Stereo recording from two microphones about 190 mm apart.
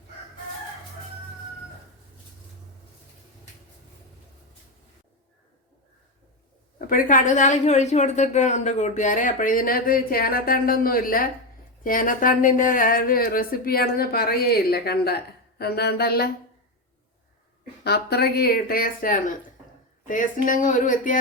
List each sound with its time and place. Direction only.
6.7 s a woman's voice: 45° left (ahead or behind)
17.8 s a woman's voice: 60° left (ahead or behind)